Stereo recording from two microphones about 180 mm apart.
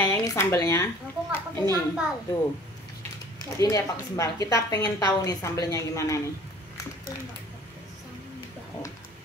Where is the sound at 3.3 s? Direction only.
20° left (ahead or behind).